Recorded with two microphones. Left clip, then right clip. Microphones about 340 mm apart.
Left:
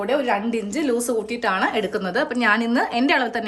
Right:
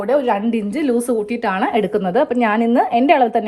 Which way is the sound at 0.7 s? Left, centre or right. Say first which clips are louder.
Right 4 dB; centre.